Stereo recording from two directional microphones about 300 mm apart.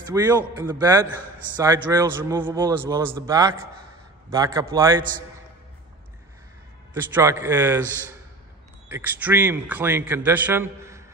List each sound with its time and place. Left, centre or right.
0.0 s a man's voice: centre
6.9 s a man's voice: centre
8.8 s a man's voice: centre